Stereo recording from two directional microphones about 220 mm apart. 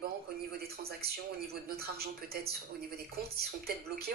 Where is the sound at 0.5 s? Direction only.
45° right (ahead or behind).